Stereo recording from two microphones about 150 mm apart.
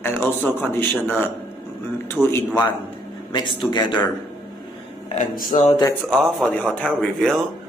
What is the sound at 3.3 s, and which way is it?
Speech, 35° left (ahead or behind).